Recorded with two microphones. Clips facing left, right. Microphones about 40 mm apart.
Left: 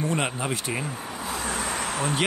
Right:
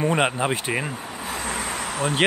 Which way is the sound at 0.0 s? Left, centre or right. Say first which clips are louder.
Right 6 dB; right.